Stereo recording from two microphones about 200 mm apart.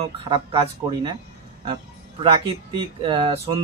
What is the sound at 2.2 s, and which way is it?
Speech, 25° right (ahead or behind).